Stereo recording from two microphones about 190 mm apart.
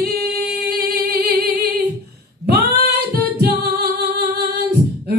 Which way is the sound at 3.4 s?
55° right (ahead or behind).